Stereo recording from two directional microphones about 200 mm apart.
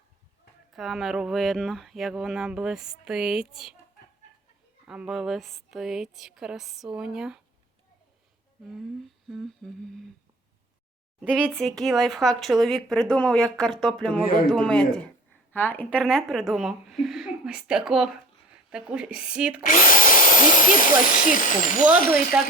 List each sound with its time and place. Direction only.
0.7 s speech: centre (ahead or behind)
4.9 s speech: centre (ahead or behind)
8.6 s speech: centre (ahead or behind)
11.2 s speech: 5° right (ahead or behind)
19.6 s speech: 45° left (ahead or behind)
22.4 s speech: 5° right (ahead or behind)